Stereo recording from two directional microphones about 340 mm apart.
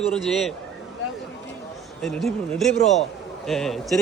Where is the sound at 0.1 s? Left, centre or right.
Centre.